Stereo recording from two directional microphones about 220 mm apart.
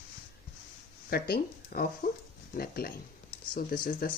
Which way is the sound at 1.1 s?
40° left (ahead or behind).